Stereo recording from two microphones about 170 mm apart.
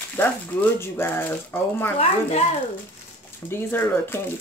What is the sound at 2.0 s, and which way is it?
Speech, 40° left (ahead or behind).